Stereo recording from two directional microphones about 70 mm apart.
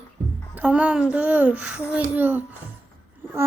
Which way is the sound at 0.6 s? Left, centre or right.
Centre.